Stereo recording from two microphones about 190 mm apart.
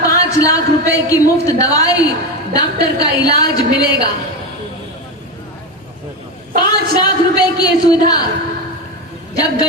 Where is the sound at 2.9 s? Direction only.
20° left (ahead or behind).